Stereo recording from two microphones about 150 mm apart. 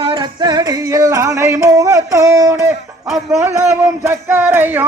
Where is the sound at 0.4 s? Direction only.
25° right (ahead or behind).